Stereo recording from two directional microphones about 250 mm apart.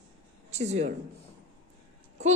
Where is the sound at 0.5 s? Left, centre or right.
Right.